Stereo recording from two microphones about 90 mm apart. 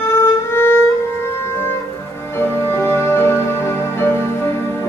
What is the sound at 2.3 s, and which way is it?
Music, 25° left (ahead or behind).